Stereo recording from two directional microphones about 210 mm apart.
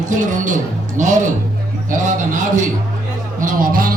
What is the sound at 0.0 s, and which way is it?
A man's voice, 35° right (ahead or behind).